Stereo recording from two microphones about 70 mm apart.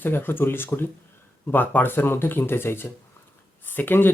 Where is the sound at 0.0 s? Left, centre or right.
Left.